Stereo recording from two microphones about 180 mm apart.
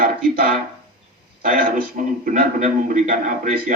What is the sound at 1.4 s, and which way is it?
A man's voice, 50° right (ahead or behind).